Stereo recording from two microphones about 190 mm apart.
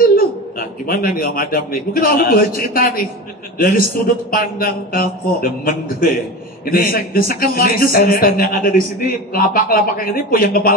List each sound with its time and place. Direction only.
0.1 s a man's voice: 50° left (ahead or behind)